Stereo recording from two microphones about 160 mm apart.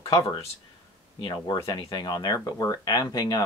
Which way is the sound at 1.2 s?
25° left (ahead or behind).